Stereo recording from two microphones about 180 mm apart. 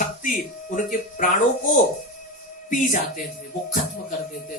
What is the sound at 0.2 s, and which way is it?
Speech, 50° left (ahead or behind).